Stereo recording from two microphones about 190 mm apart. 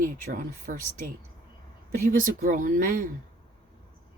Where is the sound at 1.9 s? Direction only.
45° right (ahead or behind).